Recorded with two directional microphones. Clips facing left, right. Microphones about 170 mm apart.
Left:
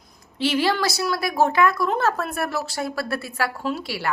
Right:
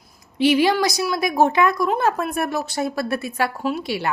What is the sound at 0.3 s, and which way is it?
A woman's voice, 15° right (ahead or behind).